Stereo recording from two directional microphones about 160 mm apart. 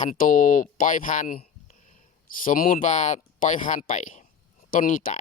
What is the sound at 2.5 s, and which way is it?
Speech, 60° left (ahead or behind).